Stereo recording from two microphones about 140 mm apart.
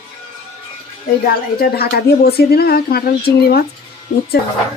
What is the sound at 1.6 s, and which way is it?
A woman's voice, 90° left.